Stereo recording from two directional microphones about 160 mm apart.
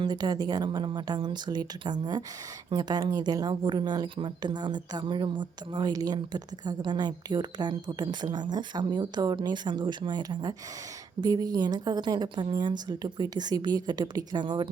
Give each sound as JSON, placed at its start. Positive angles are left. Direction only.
{"t": 0.0, "sound": "speech", "side_deg": -25}